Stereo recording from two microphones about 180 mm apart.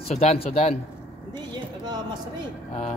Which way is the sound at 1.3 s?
25° right (ahead or behind).